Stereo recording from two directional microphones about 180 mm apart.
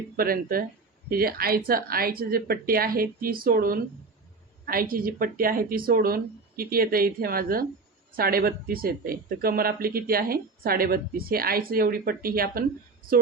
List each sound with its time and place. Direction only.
0.2 s speech: 55° right (ahead or behind)